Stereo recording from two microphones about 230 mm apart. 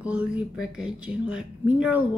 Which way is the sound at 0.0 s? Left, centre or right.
Centre.